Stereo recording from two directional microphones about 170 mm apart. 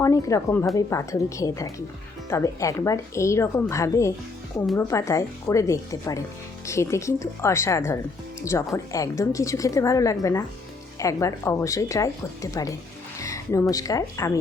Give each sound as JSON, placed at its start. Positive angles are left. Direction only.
{"t": 0.0, "sound": "a woman's voice", "side_deg": 20}